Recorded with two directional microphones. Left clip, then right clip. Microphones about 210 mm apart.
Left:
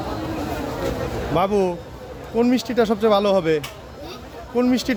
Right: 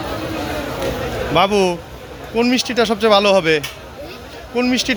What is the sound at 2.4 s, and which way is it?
A man's voice, 15° left (ahead or behind).